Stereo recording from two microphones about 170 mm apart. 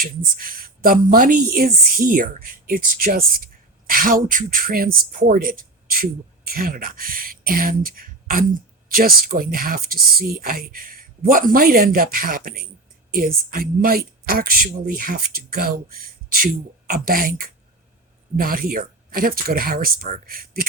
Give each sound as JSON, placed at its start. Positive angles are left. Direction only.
{"t": 0.0, "sound": "a woman's voice", "side_deg": -55}
{"t": 16.9, "sound": "a woman's voice", "side_deg": -60}